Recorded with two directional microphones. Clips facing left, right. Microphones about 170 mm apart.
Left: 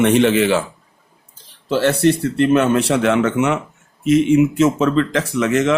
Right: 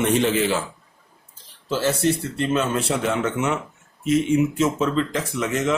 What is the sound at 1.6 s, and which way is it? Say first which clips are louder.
Speech: left 6 dB; 65° left (ahead or behind).